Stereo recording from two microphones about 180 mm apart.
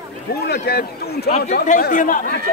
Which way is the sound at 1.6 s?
50° left (ahead or behind).